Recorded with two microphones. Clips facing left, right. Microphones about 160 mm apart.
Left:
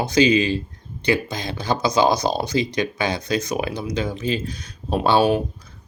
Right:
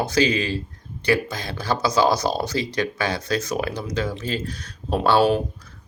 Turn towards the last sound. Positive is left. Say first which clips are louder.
# even
turn(degrees=15)  # may be behind; listen again after turning